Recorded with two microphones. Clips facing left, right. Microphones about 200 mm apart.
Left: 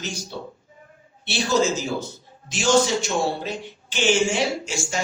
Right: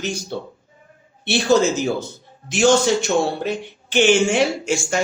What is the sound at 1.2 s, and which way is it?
A man's voice, 60° right (ahead or behind).